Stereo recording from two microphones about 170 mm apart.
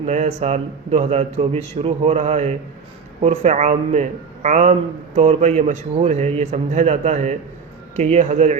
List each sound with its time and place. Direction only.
0.0 s a man's voice: 40° right (ahead or behind)